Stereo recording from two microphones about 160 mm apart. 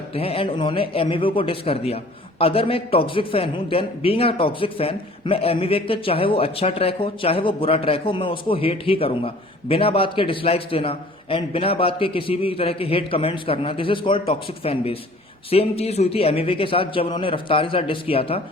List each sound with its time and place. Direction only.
0.1 s a man's voice: 40° left (ahead or behind)